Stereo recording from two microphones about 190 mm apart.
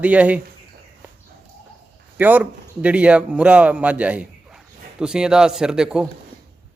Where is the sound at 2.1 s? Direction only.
10° right (ahead or behind).